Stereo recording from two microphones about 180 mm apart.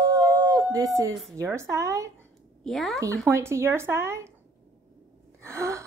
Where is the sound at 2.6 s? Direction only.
Centre (ahead or behind).